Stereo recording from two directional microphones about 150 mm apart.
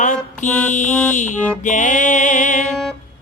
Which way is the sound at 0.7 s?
55° left (ahead or behind).